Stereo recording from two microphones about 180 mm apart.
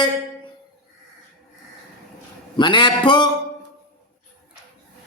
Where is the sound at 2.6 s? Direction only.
25° left (ahead or behind).